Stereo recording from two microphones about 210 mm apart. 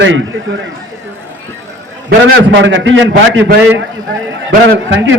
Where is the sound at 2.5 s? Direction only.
60° right (ahead or behind).